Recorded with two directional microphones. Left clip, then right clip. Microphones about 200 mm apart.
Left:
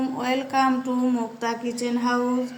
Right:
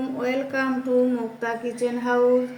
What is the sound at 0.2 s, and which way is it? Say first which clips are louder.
A woman's voice: left 2 dB; 45° left (ahead or behind).